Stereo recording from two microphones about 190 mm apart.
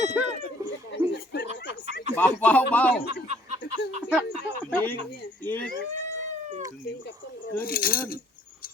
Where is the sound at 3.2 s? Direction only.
35° right (ahead or behind).